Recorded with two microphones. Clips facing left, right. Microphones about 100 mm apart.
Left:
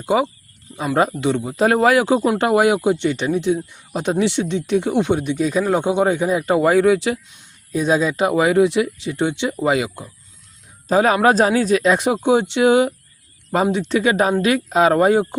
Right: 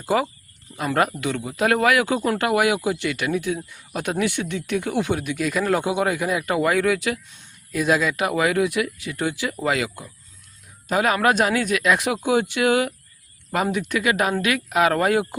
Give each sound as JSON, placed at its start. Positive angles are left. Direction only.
{"t": 0.0, "sound": "speech", "side_deg": 20}